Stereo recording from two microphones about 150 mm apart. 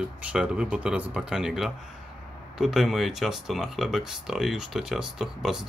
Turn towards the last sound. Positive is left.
turn(degrees=-5)  # may be behind; listen again after turning